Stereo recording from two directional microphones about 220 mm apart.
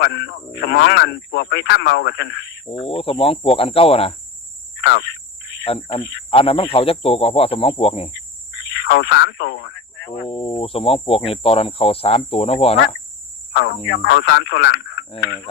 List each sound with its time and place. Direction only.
0.0 s speech: 50° left (ahead or behind)
2.9 s speech: 25° left (ahead or behind)
4.8 s insect: 50° left (ahead or behind)
5.6 s speech: 25° left (ahead or behind)
8.5 s speech: 50° left (ahead or behind)
10.2 s speech: 25° left (ahead or behind)
13.5 s speech: 55° left (ahead or behind)